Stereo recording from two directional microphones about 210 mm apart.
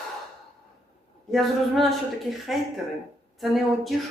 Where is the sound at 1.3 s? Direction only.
Centre (ahead or behind).